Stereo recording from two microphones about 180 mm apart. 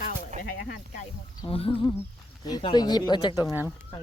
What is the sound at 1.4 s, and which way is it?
Speech, 30° left (ahead or behind).